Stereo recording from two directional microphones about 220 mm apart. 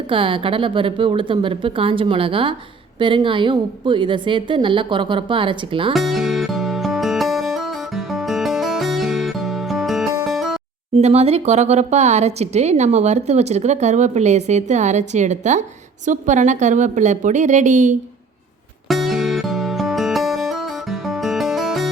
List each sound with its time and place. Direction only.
0.1 s a woman's voice: 25° right (ahead or behind)
5.9 s music: centre (ahead or behind)
10.9 s speech: 30° right (ahead or behind)
18.9 s music: centre (ahead or behind)